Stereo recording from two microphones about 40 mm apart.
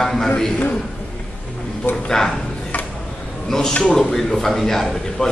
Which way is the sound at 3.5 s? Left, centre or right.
Centre.